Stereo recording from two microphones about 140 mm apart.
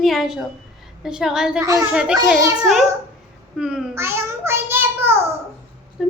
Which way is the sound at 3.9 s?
15° right (ahead or behind).